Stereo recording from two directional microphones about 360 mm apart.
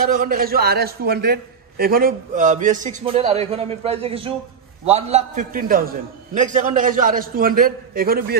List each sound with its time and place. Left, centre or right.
0.0 s a man's voice: right